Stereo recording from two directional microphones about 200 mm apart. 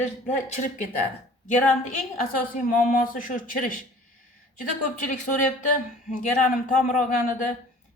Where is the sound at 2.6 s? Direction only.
40° left (ahead or behind).